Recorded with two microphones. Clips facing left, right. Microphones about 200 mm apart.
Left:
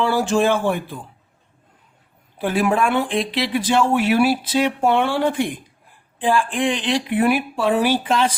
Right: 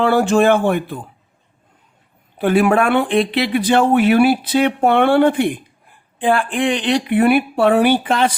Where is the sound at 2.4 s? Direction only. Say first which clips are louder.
Right 5 dB; 60° right (ahead or behind).